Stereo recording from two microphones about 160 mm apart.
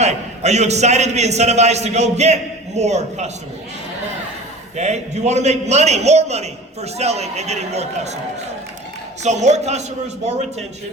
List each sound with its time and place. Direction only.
0.0 s a man's voice: 45° right (ahead or behind)
4.8 s a man's voice: 45° right (ahead or behind)
9.2 s a man's voice: 45° right (ahead or behind)